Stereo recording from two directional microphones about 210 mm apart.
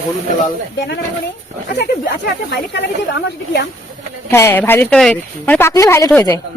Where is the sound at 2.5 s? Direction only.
55° left (ahead or behind).